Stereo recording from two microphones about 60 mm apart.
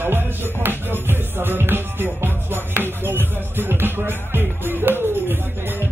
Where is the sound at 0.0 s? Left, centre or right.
Right.